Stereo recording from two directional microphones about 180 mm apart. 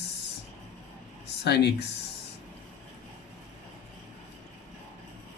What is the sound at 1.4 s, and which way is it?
Speech, 75° left (ahead or behind).